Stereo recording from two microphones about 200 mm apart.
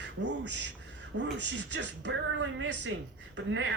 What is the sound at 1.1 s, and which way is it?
A man's voice, 60° right (ahead or behind).